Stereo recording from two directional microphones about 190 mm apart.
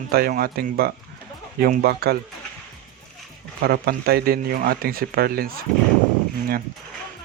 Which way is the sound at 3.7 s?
55° right (ahead or behind).